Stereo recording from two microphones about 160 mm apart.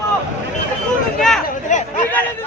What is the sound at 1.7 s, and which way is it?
Chatter, 50° left (ahead or behind).